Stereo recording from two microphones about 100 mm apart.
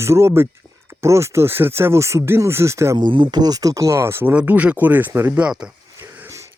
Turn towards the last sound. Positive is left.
turn(degrees=-25)  # may be behind; listen again after turning